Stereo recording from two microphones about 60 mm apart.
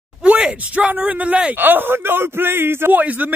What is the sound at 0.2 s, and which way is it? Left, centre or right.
A man's voice, centre.